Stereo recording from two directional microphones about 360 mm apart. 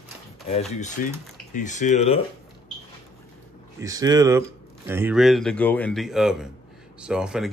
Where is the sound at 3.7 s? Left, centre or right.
Centre.